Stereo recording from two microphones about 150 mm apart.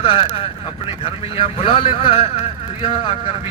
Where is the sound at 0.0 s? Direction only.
40° left (ahead or behind).